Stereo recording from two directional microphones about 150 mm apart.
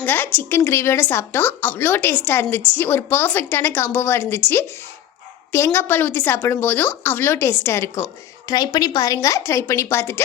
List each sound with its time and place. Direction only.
0.0 s a woman's voice: 15° left (ahead or behind)